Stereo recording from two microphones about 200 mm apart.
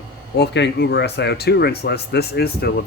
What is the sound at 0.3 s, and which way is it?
Speech, 60° left (ahead or behind).